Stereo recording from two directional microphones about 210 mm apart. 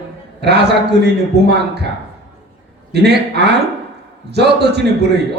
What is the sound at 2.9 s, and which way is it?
Speech, 50° right (ahead or behind).